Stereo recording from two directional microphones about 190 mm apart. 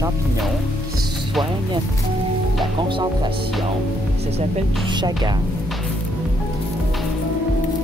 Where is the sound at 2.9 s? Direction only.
25° right (ahead or behind).